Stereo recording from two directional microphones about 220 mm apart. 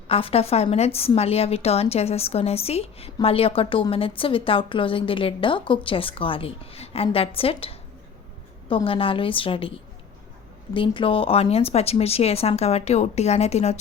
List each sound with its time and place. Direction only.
0.1 s a woman's voice: 25° left (ahead or behind)
10.8 s a woman's voice: 25° left (ahead or behind)